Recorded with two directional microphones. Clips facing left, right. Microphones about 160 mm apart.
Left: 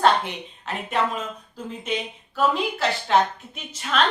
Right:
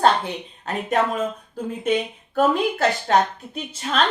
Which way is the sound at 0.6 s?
45° right (ahead or behind).